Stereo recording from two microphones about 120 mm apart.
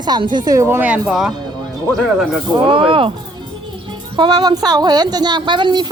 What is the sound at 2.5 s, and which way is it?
Speech, 45° right (ahead or behind).